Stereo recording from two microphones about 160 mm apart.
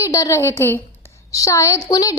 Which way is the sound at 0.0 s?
20° left (ahead or behind).